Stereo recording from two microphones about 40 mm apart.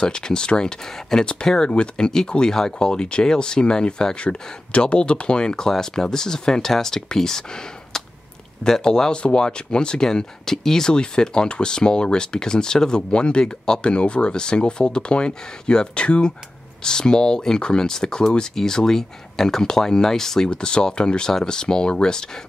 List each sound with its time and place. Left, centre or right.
0.0 s speech: left
20.4 s speech: left